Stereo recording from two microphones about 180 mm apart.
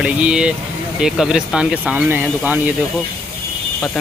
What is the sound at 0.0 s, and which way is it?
Speech, 5° right (ahead or behind).